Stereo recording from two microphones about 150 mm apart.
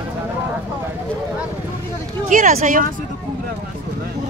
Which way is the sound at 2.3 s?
60° right (ahead or behind).